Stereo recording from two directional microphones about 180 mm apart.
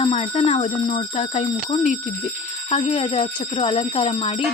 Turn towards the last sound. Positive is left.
turn(degrees=35)  # may be behind; listen again after turning